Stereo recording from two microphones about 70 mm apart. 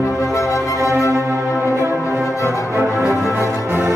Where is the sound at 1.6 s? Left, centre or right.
Right.